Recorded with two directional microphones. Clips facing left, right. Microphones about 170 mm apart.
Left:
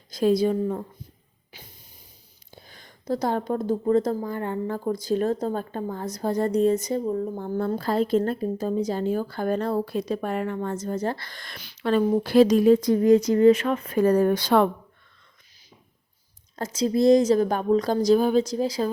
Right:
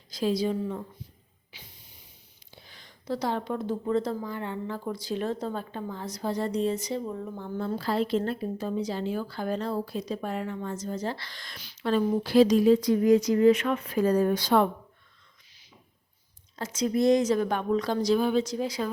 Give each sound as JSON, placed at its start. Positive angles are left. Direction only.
{"t": 0.1, "sound": "a woman's voice", "side_deg": 50}
{"t": 1.5, "sound": "hiss", "side_deg": 45}
{"t": 2.6, "sound": "a woman's voice", "side_deg": 45}
{"t": 16.6, "sound": "a woman's voice", "side_deg": 35}